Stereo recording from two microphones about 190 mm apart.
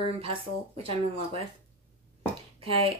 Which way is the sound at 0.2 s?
30° right (ahead or behind).